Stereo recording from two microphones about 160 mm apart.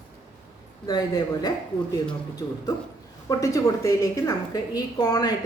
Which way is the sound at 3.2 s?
20° left (ahead or behind).